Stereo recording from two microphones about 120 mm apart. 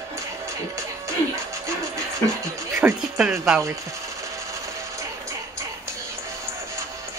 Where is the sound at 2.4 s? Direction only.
20° right (ahead or behind).